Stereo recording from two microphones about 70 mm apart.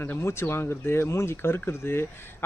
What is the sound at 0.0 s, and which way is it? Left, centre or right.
Speech, left.